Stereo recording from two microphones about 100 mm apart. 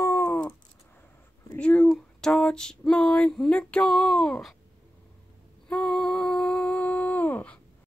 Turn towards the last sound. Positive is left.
turn(degrees=15)  # may be behind; listen again after turning